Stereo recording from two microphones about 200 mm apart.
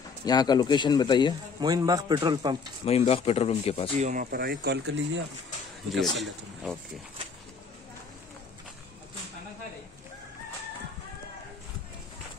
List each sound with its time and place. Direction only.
0.2 s speech: 20° left (ahead or behind)
1.6 s a man's voice: 20° right (ahead or behind)
2.8 s speech: 30° left (ahead or behind)
3.9 s speech: 35° right (ahead or behind); by 5.2 s 60° right (ahead or behind)
5.9 s a man's voice: centre (ahead or behind)